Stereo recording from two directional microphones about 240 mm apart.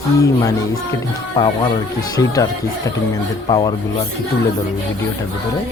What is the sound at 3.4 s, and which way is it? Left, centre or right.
Speech, centre.